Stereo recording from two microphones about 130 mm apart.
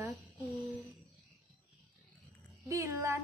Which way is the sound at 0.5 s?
Centre (ahead or behind).